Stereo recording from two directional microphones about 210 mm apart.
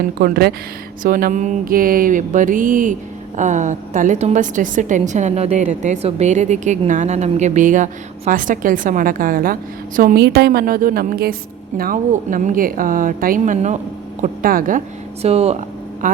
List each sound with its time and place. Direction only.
0.2 s a woman's voice: 45° right (ahead or behind)
15.2 s a woman's voice: 30° right (ahead or behind)